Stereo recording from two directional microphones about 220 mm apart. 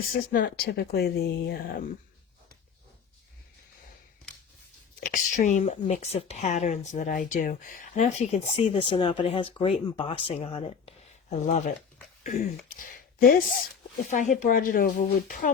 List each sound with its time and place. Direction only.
0.4 s speech: 45° left (ahead or behind)
4.9 s speech: 40° left (ahead or behind)